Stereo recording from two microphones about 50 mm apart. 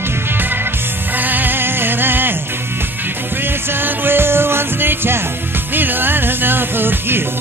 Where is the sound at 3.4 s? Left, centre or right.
Right.